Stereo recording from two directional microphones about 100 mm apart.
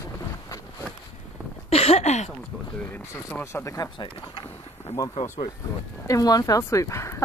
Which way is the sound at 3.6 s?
35° left (ahead or behind).